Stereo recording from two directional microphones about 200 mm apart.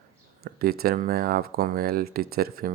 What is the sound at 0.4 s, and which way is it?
Speech, 50° right (ahead or behind).